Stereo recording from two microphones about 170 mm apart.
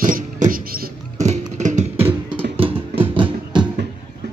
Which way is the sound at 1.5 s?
40° right (ahead or behind).